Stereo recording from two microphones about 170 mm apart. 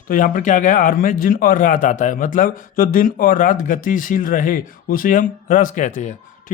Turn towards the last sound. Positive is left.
turn(degrees=50)  # may be behind; listen again after turning